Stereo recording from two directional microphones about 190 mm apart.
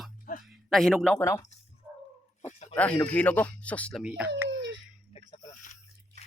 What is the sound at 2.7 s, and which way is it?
Speech, 5° left (ahead or behind).